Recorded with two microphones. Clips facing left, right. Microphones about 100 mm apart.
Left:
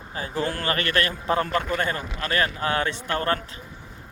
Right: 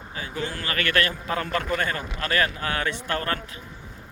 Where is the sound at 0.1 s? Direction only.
35° left (ahead or behind).